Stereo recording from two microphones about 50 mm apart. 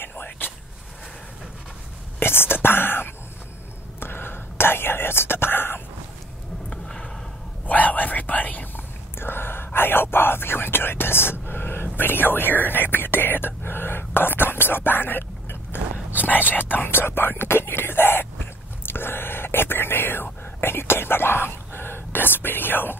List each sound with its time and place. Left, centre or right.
0.1 s whispering: left
2.1 s whispering: left
6.7 s a sound: left
7.6 s whispering: left
9.2 s whispering: left